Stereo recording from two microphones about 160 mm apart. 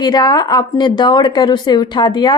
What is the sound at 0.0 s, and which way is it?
A woman's voice, 25° left (ahead or behind).